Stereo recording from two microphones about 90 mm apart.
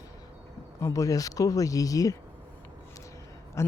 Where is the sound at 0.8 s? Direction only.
35° left (ahead or behind).